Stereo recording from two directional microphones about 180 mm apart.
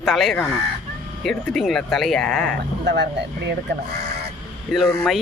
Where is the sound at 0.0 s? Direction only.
Centre (ahead or behind).